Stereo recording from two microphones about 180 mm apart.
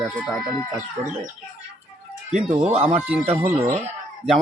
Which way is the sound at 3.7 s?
35° right (ahead or behind).